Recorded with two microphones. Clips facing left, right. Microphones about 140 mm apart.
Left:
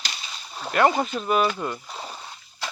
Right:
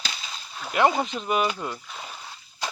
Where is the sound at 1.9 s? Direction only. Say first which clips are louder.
Left 3 dB; 30° left (ahead or behind).